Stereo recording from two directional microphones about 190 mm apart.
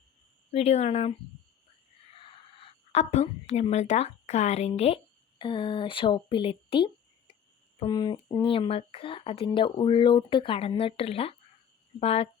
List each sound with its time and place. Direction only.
0.5 s speech: 35° left (ahead or behind)
2.2 s a woman's voice: 30° left (ahead or behind)